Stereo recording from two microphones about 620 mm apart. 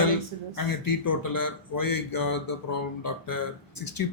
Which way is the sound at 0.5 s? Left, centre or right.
Left.